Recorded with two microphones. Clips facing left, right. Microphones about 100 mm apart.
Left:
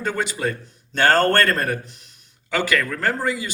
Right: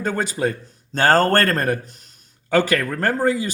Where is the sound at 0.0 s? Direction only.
40° right (ahead or behind).